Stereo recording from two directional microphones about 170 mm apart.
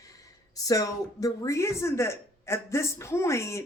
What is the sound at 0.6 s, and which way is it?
Speech, 20° left (ahead or behind).